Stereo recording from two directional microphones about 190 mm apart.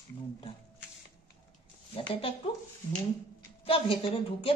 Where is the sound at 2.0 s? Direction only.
30° left (ahead or behind).